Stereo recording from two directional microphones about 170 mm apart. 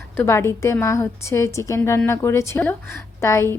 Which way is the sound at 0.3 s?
15° left (ahead or behind).